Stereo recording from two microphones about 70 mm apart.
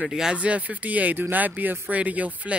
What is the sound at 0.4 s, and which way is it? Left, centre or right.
Speech, right.